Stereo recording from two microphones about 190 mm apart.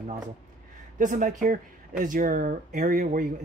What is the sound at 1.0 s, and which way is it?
Speech, 40° right (ahead or behind).